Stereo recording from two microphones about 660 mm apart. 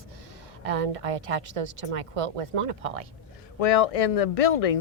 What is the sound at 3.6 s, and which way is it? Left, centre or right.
Speech, left.